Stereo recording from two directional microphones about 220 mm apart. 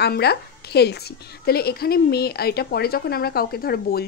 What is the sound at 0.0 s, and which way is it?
A woman's voice, 50° left (ahead or behind).